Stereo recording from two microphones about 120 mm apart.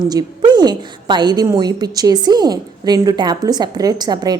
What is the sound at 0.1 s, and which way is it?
A woman's voice, 35° right (ahead or behind).